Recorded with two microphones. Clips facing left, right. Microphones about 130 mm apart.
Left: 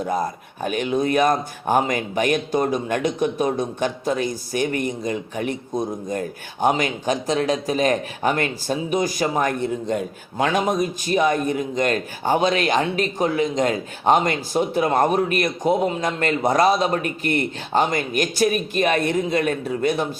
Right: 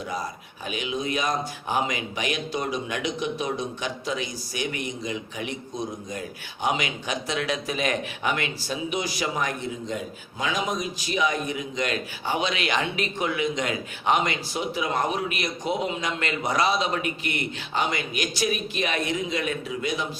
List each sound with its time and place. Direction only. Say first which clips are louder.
0.0 s speech: left 8 dB; 50° left (ahead or behind)